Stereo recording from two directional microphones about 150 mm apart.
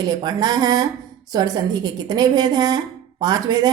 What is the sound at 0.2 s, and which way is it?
A woman's voice, 30° right (ahead or behind).